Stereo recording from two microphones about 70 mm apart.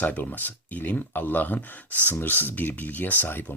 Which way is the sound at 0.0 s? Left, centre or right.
Left.